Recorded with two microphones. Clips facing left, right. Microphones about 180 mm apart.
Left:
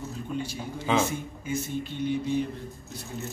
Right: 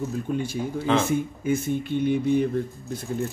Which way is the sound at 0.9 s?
5° left (ahead or behind).